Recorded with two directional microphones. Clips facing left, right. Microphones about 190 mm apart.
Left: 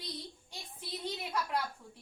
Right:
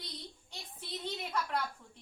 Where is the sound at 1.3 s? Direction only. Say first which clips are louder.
Even; 10° left (ahead or behind).